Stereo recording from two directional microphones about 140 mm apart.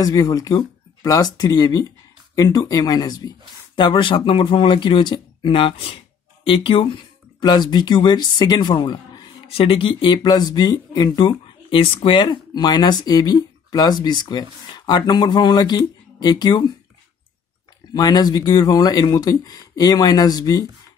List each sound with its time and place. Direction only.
0.0 s speech: 25° left (ahead or behind)
9.5 s speech: 40° left (ahead or behind)
17.9 s speech: 30° left (ahead or behind)